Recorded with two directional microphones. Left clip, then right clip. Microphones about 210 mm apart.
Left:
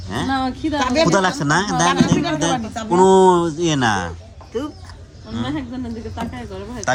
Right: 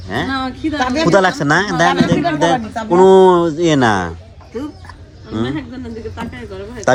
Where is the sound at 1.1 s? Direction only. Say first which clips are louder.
Right 5 dB; 20° left (ahead or behind).